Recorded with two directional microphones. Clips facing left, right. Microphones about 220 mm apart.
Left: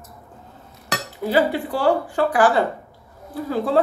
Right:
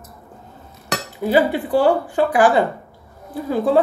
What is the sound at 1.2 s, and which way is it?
Speech, 15° right (ahead or behind).